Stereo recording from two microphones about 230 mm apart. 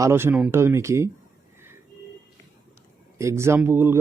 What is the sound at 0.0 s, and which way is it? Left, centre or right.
Speech, centre.